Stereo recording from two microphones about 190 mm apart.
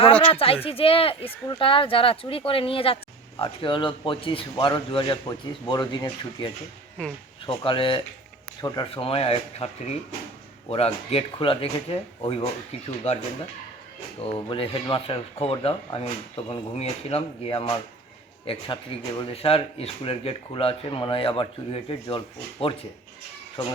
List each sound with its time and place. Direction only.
0.3 s speech: 30° left (ahead or behind)
7.0 s speech: 5° left (ahead or behind)
7.4 s speech: 25° left (ahead or behind)
14.2 s speech: 30° left (ahead or behind)